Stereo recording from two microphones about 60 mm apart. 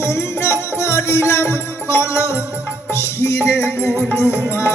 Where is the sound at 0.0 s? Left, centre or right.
Left.